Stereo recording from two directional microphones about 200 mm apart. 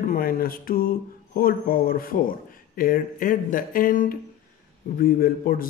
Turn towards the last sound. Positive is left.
turn(degrees=45)  # may be behind; listen again after turning